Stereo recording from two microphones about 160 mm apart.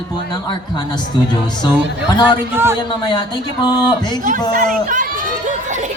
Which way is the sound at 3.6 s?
25° left (ahead or behind).